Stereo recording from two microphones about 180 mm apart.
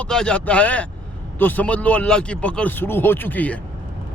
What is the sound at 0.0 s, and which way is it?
A man's voice, 5° left (ahead or behind).